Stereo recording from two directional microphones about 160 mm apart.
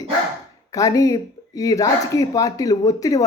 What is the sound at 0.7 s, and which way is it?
Speech, 20° left (ahead or behind).